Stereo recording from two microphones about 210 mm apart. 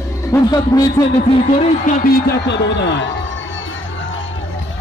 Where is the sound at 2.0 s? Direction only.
55° left (ahead or behind).